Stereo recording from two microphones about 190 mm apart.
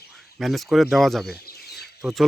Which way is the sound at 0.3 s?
Centre (ahead or behind).